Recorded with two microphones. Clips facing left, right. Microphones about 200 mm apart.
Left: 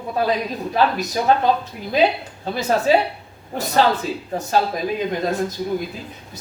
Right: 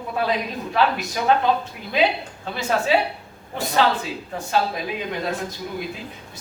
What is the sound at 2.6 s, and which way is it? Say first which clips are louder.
Speech: left 3 dB; 40° left (ahead or behind).